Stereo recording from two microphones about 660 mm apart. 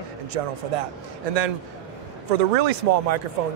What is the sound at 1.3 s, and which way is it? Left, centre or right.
Speech, right.